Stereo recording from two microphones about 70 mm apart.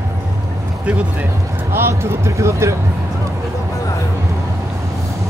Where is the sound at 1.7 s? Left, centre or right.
Right.